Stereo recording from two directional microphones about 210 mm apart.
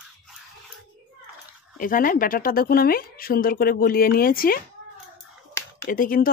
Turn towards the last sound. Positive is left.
turn(degrees=40)  # may be behind; listen again after turning